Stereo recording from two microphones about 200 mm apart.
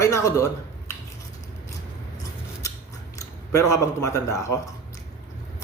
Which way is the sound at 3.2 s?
15° left (ahead or behind).